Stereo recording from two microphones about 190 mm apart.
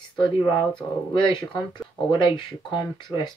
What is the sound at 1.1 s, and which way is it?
Speech, 25° left (ahead or behind).